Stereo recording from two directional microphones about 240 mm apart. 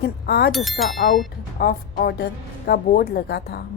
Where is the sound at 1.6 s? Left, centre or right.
Left.